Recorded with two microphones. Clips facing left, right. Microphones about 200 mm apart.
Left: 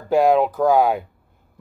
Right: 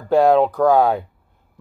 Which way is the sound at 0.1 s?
Centre (ahead or behind).